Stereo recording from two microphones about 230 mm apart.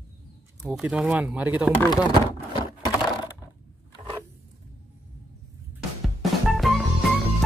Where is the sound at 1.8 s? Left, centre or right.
Centre.